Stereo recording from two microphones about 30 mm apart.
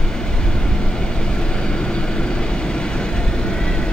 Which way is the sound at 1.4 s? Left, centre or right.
Left.